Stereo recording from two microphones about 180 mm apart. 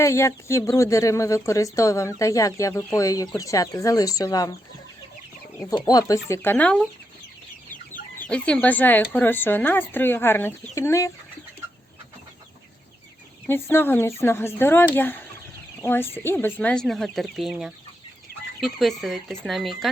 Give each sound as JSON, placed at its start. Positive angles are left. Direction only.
{"t": 0.0, "sound": "speech", "side_deg": 15}
{"t": 5.5, "sound": "speech", "side_deg": 20}
{"t": 7.7, "sound": "chicken", "side_deg": 45}
{"t": 8.3, "sound": "speech", "side_deg": 5}
{"t": 13.5, "sound": "speech", "side_deg": 10}